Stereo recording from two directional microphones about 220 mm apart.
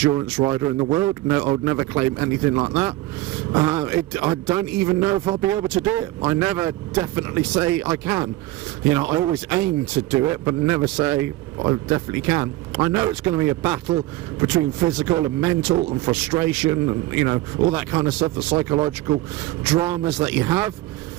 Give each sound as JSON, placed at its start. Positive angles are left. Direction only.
{"t": 0.0, "sound": "a man's voice", "side_deg": -15}